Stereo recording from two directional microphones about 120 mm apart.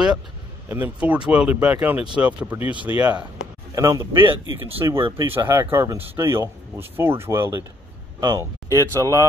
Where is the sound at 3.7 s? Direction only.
30° right (ahead or behind).